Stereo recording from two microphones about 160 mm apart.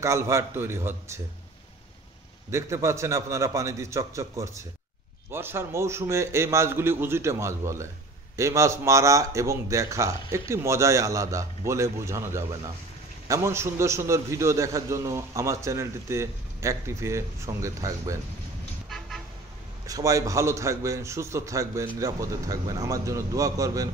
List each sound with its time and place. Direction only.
0.0 s a man's voice: 20° right (ahead or behind)
2.5 s a man's voice: 20° right (ahead or behind)
18.9 s vehicle: centre (ahead or behind)
19.9 s a man's voice: 20° right (ahead or behind)